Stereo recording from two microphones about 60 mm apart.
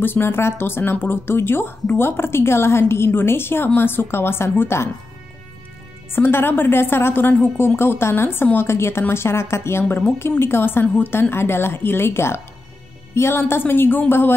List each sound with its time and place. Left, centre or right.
0.0 s a woman's voice: left
6.1 s a woman's voice: left